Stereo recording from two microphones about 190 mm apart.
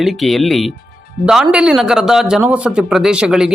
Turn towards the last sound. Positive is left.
turn(degrees=-5)  # may be behind; listen again after turning